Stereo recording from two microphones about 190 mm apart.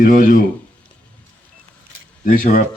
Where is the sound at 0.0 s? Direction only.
45° left (ahead or behind).